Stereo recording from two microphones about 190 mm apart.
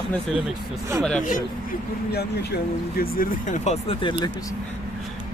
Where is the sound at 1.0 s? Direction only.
5° left (ahead or behind).